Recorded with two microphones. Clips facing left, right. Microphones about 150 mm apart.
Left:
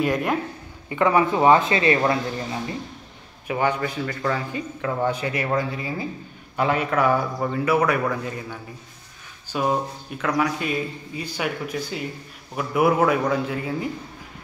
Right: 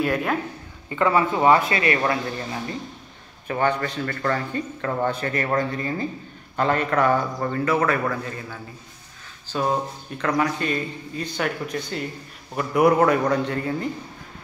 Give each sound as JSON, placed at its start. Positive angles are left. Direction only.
{"t": 0.0, "sound": "a man's voice", "side_deg": 10}
{"t": 3.4, "sound": "a man's voice", "side_deg": 10}